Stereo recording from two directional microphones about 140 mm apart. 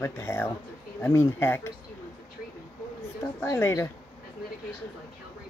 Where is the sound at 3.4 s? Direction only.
20° left (ahead or behind).